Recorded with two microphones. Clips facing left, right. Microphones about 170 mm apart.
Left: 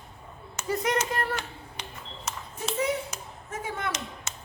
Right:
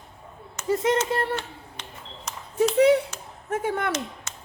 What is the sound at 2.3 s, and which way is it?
Ping, 5° left (ahead or behind).